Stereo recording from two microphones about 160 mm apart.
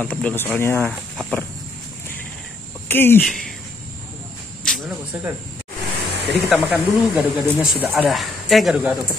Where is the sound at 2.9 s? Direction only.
15° left (ahead or behind).